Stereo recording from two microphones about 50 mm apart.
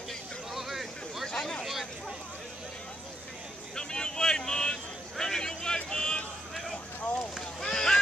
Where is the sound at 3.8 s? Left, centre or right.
Centre.